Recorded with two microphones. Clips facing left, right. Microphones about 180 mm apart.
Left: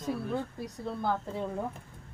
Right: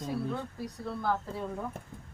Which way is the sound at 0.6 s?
20° left (ahead or behind).